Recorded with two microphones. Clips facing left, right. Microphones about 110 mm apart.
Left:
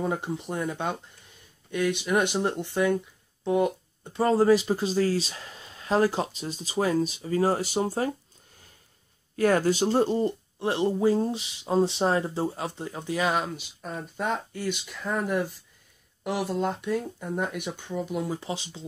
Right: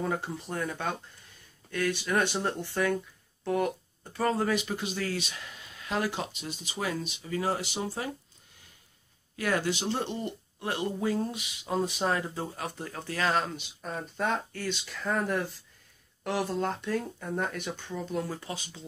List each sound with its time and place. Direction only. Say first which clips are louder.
0.0 s speech: left 3 dB; 20° left (ahead or behind); by 8.1 s 40° left (ahead or behind)
9.4 s speech: left 7 dB; 40° left (ahead or behind); by 18.9 s 25° left (ahead or behind)